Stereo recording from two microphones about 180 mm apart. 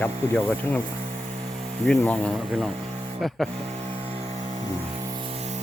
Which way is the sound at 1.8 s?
5° left (ahead or behind).